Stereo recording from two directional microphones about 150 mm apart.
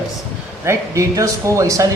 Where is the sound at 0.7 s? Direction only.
20° right (ahead or behind).